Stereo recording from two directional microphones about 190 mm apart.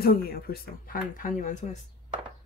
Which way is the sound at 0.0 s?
50° left (ahead or behind).